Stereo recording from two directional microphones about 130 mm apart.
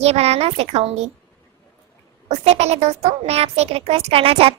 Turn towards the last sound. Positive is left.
turn(degrees=-50)  # may be behind; listen again after turning